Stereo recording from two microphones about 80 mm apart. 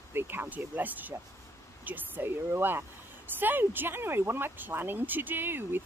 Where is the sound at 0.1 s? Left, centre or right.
Right.